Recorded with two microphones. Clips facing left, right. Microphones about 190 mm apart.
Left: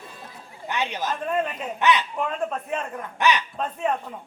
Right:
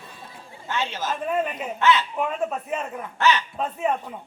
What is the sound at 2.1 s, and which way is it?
Speech, 5° right (ahead or behind).